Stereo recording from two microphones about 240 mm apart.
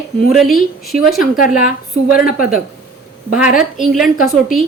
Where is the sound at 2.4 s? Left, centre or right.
Centre.